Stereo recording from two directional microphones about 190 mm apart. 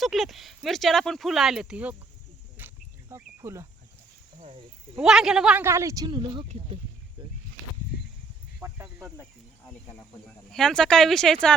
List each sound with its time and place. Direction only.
0.0 s speech: centre (ahead or behind)
2.6 s a sound: 10° right (ahead or behind)
4.9 s speech: centre (ahead or behind); by 6.4 s 25° right (ahead or behind)
8.6 s snake: 15° right (ahead or behind)
10.2 s speech: 5° left (ahead or behind)